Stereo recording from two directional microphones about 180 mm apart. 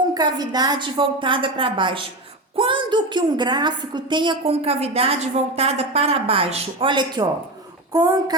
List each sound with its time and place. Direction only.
0.1 s a woman's voice: 20° right (ahead or behind)